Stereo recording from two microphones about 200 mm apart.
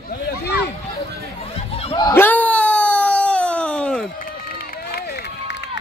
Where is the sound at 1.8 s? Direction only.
25° left (ahead or behind).